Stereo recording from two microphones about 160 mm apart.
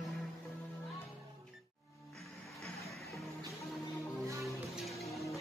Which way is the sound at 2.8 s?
Centre (ahead or behind).